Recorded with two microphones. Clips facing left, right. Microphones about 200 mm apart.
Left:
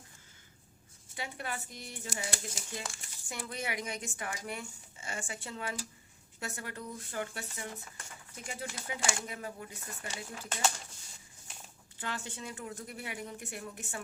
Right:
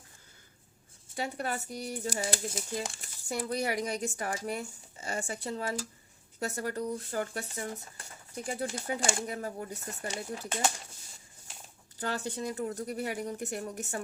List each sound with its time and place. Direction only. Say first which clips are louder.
1.1 s speech: right 6 dB; 40° right (ahead or behind)
11.9 s speech: right 7 dB; 40° right (ahead or behind)